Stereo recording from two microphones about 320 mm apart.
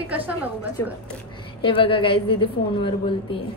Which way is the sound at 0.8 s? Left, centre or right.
Centre.